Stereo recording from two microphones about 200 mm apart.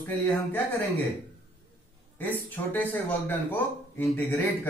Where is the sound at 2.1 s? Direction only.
10° left (ahead or behind).